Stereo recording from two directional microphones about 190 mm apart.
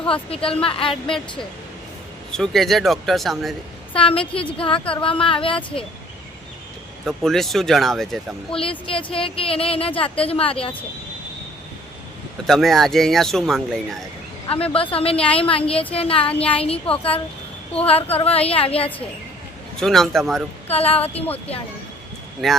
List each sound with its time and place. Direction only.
0.1 s a woman's voice: 30° left (ahead or behind)
2.3 s speech: centre (ahead or behind)
3.9 s a woman's voice: 30° left (ahead or behind)
7.0 s speech: centre (ahead or behind)
8.9 s a woman's voice: 30° left (ahead or behind)
12.5 s speech: centre (ahead or behind)
14.4 s a woman's voice: 30° left (ahead or behind)
19.7 s speech: centre (ahead or behind)
20.7 s a woman's voice: 30° left (ahead or behind)
22.4 s speech: centre (ahead or behind)